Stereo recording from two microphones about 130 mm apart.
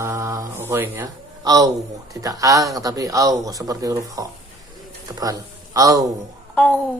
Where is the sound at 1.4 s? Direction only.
25° right (ahead or behind).